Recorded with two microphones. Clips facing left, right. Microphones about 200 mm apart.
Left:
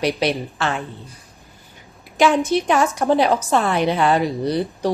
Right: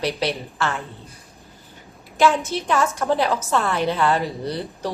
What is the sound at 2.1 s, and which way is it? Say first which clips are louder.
A woman's voice: left 3 dB; 15° left (ahead or behind).